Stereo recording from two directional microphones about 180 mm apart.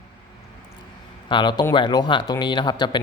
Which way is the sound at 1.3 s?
25° left (ahead or behind).